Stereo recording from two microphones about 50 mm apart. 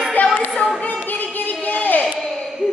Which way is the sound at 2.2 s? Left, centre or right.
Centre.